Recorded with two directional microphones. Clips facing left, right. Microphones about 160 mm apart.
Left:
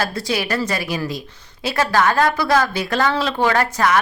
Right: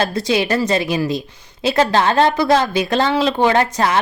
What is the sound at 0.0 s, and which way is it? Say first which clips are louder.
A woman's voice: right 5 dB; 20° right (ahead or behind).